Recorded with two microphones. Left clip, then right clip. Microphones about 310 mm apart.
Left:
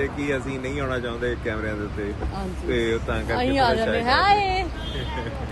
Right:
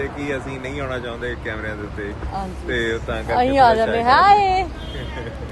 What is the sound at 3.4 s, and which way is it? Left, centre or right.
Speech, centre.